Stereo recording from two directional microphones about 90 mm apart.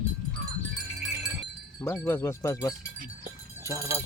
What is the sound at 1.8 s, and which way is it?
Speech, 25° left (ahead or behind).